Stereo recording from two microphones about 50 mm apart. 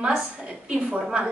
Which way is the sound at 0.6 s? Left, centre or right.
Right.